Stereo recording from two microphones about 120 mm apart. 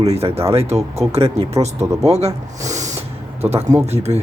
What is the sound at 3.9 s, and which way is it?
Speech, 60° right (ahead or behind).